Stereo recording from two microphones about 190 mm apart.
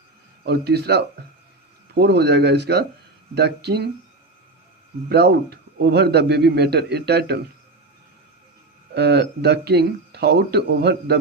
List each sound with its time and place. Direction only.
0.4 s speech: 60° right (ahead or behind)
5.0 s speech: 60° right (ahead or behind)
9.0 s speech: 60° right (ahead or behind)